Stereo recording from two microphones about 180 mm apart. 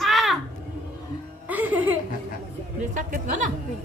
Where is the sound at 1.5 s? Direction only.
10° right (ahead or behind).